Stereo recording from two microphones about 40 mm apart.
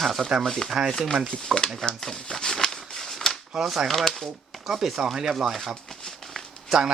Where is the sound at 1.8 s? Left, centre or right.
Centre.